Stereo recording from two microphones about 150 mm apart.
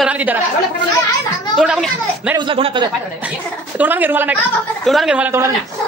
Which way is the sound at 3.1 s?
10° right (ahead or behind).